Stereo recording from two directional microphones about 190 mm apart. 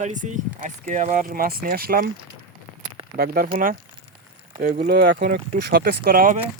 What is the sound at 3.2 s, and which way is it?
Speech, 50° right (ahead or behind).